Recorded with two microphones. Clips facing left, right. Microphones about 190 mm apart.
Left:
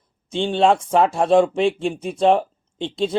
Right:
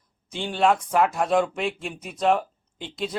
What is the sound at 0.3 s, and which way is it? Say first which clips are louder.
Speech: left 5 dB; 25° left (ahead or behind).